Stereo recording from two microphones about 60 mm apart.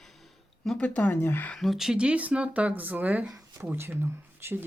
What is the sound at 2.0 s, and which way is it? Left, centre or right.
Speech, right.